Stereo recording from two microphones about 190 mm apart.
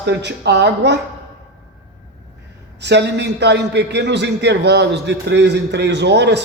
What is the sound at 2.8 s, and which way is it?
A man's voice, 65° right (ahead or behind).